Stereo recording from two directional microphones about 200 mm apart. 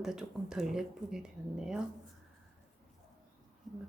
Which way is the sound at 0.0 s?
5° right (ahead or behind).